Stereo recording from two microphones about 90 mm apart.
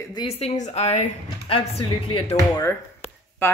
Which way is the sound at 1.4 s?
90° left.